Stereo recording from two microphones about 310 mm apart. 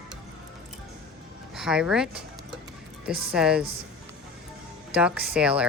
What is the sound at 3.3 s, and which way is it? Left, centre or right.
Speech, centre.